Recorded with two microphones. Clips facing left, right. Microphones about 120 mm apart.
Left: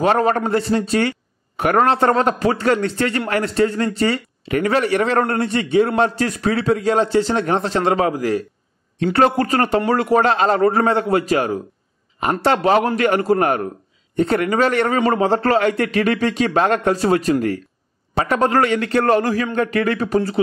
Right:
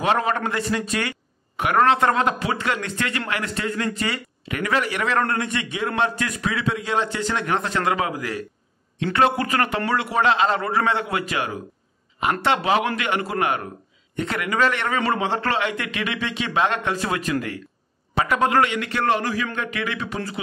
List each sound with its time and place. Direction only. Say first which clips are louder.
0.0 s a man's voice: left 5 dB; 40° left (ahead or behind)